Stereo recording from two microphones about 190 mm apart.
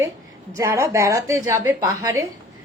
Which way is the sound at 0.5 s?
15° right (ahead or behind).